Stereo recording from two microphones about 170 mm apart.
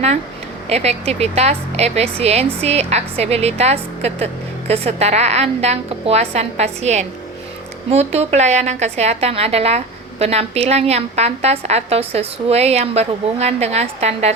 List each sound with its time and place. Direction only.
0.7 s a woman's voice: 40° right (ahead or behind)